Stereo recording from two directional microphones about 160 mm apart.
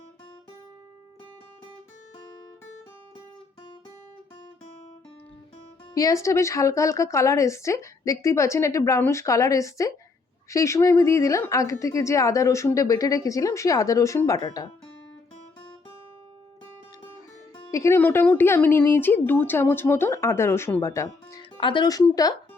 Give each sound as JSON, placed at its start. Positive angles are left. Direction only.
{"t": 5.9, "sound": "a woman's voice", "side_deg": 20}
{"t": 17.7, "sound": "speech", "side_deg": 20}
{"t": 21.6, "sound": "a woman's voice", "side_deg": 30}